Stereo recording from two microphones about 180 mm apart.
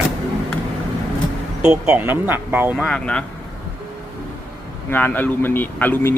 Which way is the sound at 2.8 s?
5° left (ahead or behind).